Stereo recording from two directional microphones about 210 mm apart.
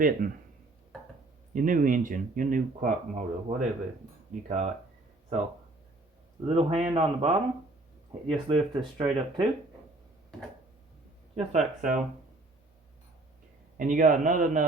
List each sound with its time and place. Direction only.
0.2 s speech: 45° right (ahead or behind)
1.5 s speech: 40° right (ahead or behind)
6.4 s a man's voice: 30° right (ahead or behind)
11.3 s speech: 35° right (ahead or behind)
13.7 s speech: 40° right (ahead or behind)